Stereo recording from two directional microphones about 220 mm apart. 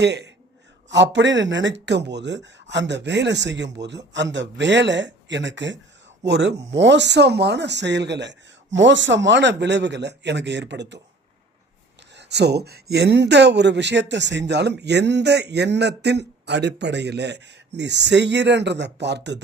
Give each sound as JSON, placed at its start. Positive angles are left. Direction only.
{"t": 0.0, "sound": "speech", "side_deg": -50}
{"t": 12.1, "sound": "speech", "side_deg": -50}